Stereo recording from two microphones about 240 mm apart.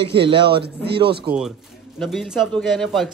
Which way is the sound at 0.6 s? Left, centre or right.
Right.